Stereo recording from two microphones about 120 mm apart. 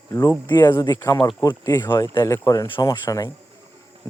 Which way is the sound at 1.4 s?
30° left (ahead or behind).